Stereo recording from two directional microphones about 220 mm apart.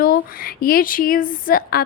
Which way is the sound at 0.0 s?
40° left (ahead or behind).